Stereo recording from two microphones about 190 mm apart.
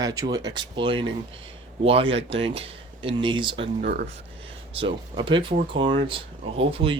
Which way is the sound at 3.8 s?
55° right (ahead or behind).